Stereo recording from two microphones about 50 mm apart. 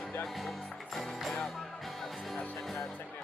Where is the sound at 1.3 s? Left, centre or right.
Centre.